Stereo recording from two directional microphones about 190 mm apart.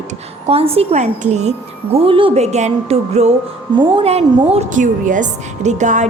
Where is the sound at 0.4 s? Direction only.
30° right (ahead or behind).